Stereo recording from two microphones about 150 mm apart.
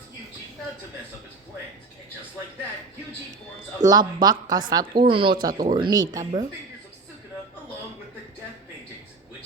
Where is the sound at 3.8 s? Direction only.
25° right (ahead or behind).